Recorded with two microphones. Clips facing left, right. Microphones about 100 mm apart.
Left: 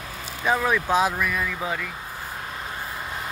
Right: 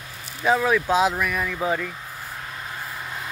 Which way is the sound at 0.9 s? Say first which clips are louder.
Right 1 dB; 15° right (ahead or behind).